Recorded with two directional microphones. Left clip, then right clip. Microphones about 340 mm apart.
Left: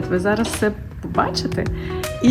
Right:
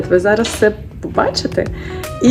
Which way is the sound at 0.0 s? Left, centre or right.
Centre.